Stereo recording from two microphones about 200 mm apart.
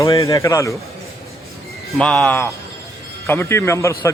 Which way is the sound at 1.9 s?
5° left (ahead or behind).